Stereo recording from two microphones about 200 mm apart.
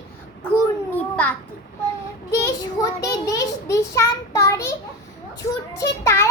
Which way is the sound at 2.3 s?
15° left (ahead or behind).